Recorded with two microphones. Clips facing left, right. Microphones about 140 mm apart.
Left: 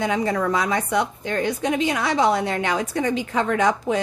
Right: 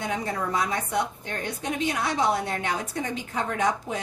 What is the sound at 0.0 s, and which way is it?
A woman's voice, 90° left.